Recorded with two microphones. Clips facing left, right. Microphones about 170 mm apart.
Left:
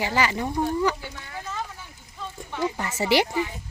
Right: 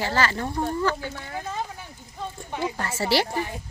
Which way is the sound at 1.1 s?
45° right (ahead or behind).